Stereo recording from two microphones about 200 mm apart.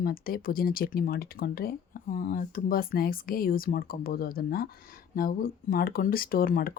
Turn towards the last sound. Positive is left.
turn(degrees=45)  # may be behind; listen again after turning